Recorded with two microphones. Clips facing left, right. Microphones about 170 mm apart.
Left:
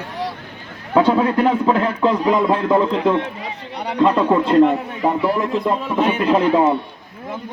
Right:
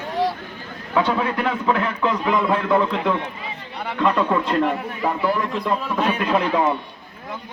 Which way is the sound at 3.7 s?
20° left (ahead or behind).